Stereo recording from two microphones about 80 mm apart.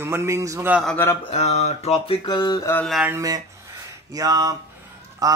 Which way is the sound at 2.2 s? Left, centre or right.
Left.